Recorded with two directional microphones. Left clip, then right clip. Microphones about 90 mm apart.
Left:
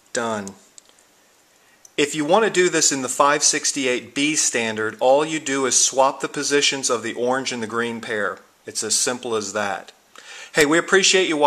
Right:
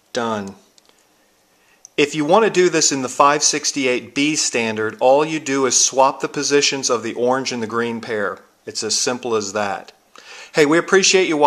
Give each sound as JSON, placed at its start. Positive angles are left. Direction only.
{"t": 0.1, "sound": "speech", "side_deg": -25}
{"t": 2.0, "sound": "speech", "side_deg": -30}